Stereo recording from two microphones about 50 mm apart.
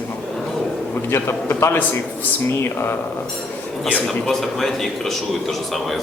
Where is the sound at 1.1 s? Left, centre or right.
Left.